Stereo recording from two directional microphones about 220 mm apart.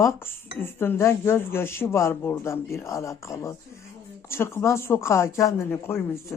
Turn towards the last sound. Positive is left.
turn(degrees=10)  # may be behind; listen again after turning